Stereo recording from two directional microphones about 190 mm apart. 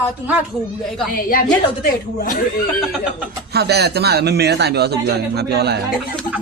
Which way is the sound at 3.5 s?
60° right (ahead or behind).